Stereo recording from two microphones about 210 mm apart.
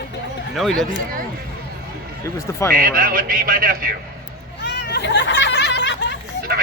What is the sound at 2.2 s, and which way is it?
Speech, 15° left (ahead or behind).